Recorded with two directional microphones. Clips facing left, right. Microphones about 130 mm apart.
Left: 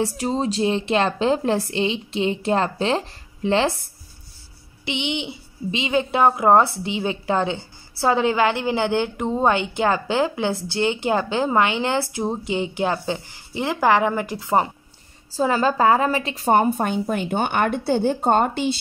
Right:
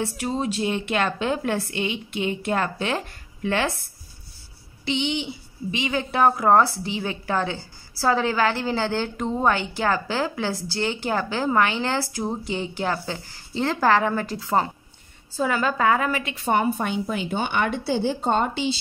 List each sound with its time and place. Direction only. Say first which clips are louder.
0.0 s a woman's voice: left 3 dB; 30° left (ahead or behind)
4.8 s a woman's voice: right 1 dB; 20° left (ahead or behind)
15.3 s a woman's voice: left 4 dB; 30° left (ahead or behind); by 18.7 s 50° left (ahead or behind)